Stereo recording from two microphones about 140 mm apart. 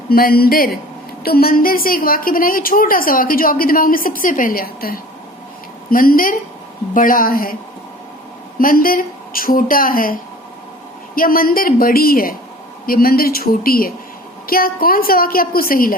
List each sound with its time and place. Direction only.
0.1 s a woman's voice: 90° left
8.5 s a woman's voice: 90° left